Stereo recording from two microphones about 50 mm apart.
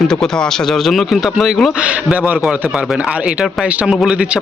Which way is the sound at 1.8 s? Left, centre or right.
Right.